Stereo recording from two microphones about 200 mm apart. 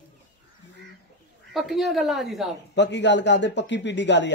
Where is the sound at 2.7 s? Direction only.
65° left (ahead or behind).